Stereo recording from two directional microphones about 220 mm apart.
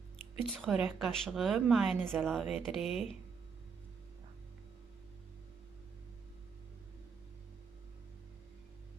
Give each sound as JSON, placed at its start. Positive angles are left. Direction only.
{"t": 0.4, "sound": "speech", "side_deg": 0}